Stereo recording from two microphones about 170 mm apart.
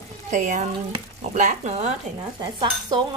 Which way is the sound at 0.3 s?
45° right (ahead or behind).